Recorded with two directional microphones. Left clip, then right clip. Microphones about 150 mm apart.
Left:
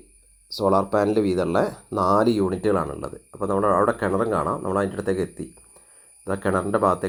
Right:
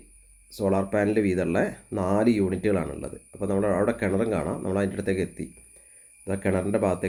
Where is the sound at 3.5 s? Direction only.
20° right (ahead or behind).